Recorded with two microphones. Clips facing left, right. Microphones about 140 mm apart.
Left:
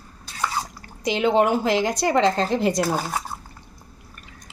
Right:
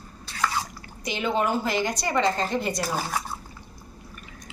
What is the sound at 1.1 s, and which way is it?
Speech, 90° left.